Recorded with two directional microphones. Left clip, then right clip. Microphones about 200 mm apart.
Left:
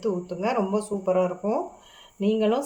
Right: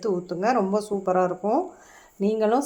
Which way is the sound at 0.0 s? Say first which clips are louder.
Right 2 dB; 35° right (ahead or behind).